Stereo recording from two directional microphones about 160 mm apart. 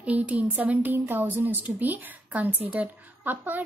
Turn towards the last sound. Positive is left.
turn(degrees=-10)  # may be behind; listen again after turning